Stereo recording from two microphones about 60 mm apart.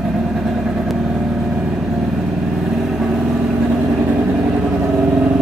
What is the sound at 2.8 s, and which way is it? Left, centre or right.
Vehicle, centre.